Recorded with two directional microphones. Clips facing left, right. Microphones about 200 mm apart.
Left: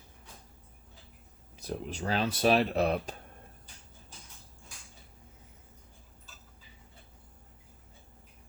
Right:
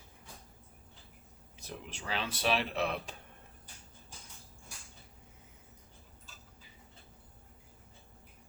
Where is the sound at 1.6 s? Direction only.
40° left (ahead or behind).